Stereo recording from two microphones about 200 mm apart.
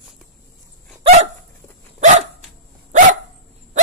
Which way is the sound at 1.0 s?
35° right (ahead or behind).